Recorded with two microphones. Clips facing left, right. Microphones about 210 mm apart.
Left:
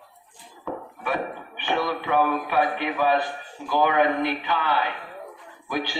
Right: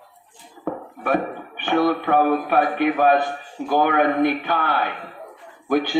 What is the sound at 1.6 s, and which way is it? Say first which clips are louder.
Speech: right 7 dB; 55° right (ahead or behind).